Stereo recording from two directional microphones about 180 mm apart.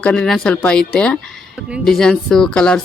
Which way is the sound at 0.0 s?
5° left (ahead or behind).